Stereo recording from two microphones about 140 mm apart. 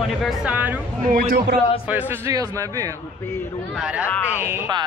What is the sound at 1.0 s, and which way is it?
Speech, 85° right.